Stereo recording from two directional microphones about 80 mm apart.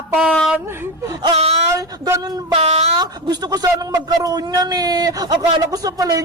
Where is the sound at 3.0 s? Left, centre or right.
Right.